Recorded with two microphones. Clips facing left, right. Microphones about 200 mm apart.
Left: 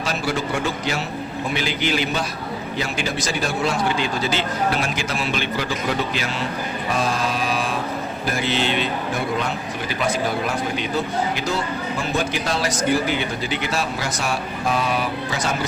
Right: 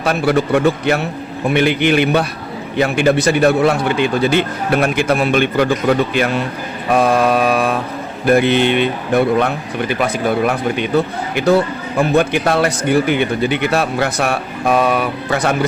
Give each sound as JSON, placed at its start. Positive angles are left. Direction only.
{"t": 0.0, "sound": "a man's voice", "side_deg": -60}
{"t": 6.9, "sound": "mantra", "side_deg": -60}
{"t": 8.3, "sound": "a man's voice", "side_deg": -60}